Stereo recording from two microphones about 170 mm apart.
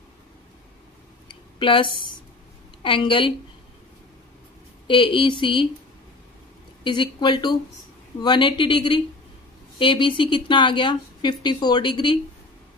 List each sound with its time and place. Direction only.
1.3 s a sound: 30° left (ahead or behind)
2.8 s speech: 30° left (ahead or behind)
4.8 s speech: 30° left (ahead or behind)
6.8 s speech: 25° left (ahead or behind)